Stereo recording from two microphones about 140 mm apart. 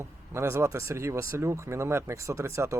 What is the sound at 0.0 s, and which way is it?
Speech, 20° right (ahead or behind).